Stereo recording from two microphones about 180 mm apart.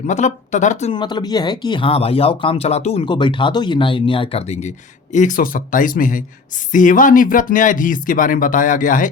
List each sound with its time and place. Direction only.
0.1 s speech: 40° left (ahead or behind)
0.9 s speech: 25° left (ahead or behind); by 9.0 s 45° left (ahead or behind)